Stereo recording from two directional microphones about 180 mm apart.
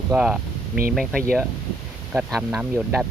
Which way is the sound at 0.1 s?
5° right (ahead or behind).